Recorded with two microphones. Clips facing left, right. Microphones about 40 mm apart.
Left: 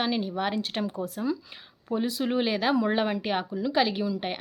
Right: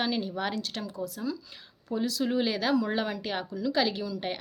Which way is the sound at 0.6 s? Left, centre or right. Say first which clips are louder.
Left 4 dB; left.